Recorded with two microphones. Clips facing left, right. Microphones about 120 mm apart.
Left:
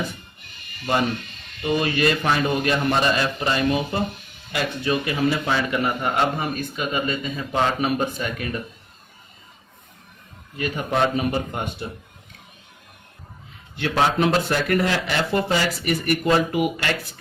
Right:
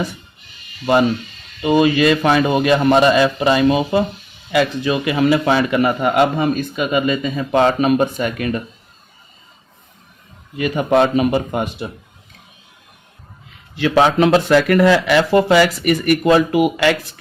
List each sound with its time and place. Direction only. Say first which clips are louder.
1.6 s a man's voice: right 8 dB; 90° right
10.6 s a man's voice: right 7 dB; 90° right
13.7 s a man's voice: right 7 dB; 90° right